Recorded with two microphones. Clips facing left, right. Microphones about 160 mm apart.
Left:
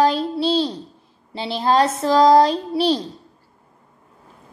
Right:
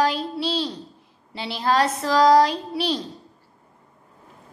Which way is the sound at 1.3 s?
30° left (ahead or behind).